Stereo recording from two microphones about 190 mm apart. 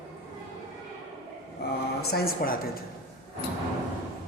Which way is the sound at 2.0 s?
55° left (ahead or behind).